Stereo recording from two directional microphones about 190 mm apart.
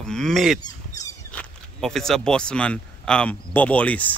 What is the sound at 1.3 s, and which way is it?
Speech, 5° left (ahead or behind).